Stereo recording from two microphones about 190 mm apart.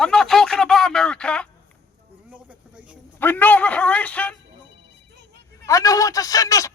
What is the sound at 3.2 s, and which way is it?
Speech, 10° left (ahead or behind).